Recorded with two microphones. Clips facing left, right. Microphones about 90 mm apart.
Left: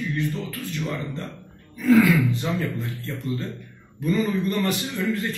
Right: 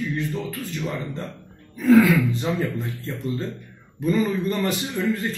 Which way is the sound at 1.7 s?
20° right (ahead or behind).